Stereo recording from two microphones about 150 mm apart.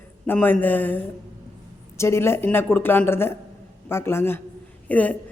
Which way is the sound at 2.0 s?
15° left (ahead or behind).